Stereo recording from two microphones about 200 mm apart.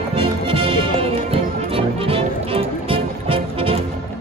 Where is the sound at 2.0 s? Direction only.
30° right (ahead or behind).